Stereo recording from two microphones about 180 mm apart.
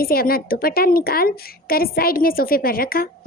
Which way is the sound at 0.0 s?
55° left (ahead or behind).